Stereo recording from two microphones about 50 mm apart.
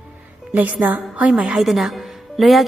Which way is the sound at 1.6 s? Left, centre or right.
Centre.